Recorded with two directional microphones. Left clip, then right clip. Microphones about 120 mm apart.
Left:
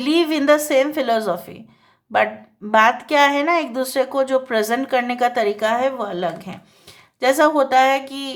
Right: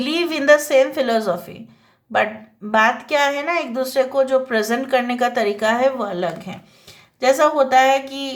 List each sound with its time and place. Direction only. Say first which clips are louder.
0.0 s speech: left 1 dB; 35° left (ahead or behind)
2.7 s speech: left 2 dB; 40° left (ahead or behind)